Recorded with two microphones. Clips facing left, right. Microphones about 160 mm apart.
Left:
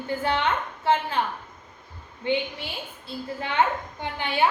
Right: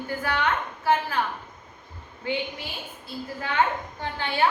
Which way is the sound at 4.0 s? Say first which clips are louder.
Left 1 dB; 15° left (ahead or behind).